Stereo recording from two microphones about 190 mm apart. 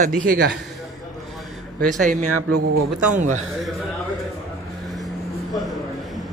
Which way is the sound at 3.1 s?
40° right (ahead or behind).